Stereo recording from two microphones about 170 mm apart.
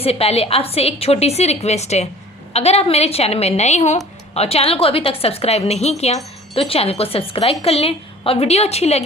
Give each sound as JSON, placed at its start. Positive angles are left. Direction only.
{"t": 0.0, "sound": "a woman's voice", "side_deg": 35}